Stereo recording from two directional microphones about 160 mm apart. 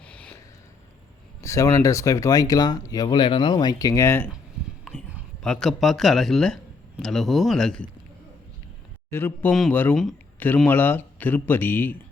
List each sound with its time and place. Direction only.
0.0 s a sound: 10° left (ahead or behind)
1.4 s speech: 20° left (ahead or behind)
5.4 s a man's voice: 5° left (ahead or behind)
9.0 s speech: 15° left (ahead or behind)